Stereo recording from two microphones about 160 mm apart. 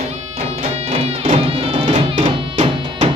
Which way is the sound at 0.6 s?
40° right (ahead or behind).